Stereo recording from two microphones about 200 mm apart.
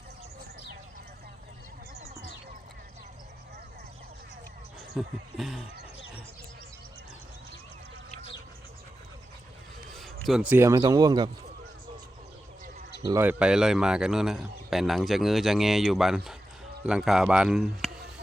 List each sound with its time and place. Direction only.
4.9 s a man's voice: centre (ahead or behind)
10.0 s speech: centre (ahead or behind); by 11.3 s 20° right (ahead or behind)
13.1 s a man's voice: 10° right (ahead or behind)